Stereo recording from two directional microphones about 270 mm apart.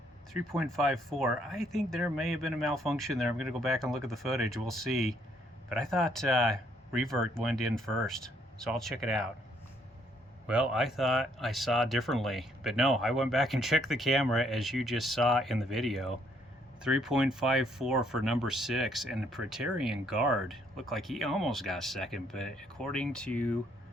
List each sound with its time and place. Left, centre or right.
0.3 s speech: centre
10.4 s speech: centre